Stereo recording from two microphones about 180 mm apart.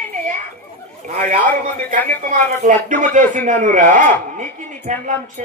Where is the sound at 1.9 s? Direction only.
45° right (ahead or behind).